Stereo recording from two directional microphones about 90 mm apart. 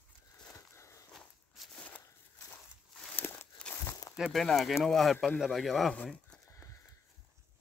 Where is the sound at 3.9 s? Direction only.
45° left (ahead or behind).